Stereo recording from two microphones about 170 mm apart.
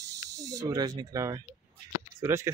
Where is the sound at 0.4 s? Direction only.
20° right (ahead or behind).